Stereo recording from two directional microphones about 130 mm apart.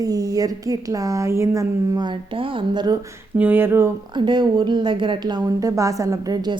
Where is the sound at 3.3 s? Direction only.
15° right (ahead or behind).